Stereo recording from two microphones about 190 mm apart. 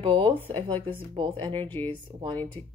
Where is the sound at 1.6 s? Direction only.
10° left (ahead or behind).